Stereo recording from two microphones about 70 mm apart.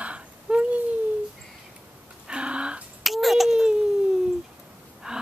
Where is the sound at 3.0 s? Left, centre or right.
Centre.